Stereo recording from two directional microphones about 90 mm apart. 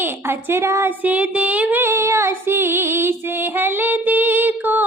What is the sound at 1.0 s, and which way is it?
Female singing, 15° right (ahead or behind).